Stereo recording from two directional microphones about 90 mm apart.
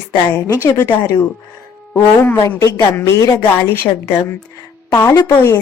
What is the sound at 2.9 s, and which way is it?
Speech, 25° left (ahead or behind).